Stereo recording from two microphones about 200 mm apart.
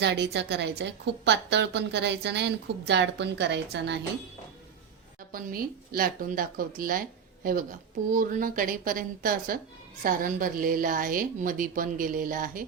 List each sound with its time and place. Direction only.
0.0 s a woman's voice: 60° right (ahead or behind)
5.3 s speech: 45° right (ahead or behind)